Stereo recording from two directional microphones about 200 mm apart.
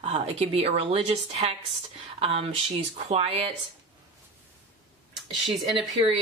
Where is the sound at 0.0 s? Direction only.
30° right (ahead or behind).